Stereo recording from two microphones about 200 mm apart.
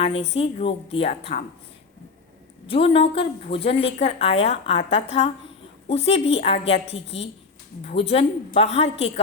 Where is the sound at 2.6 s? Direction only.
25° left (ahead or behind).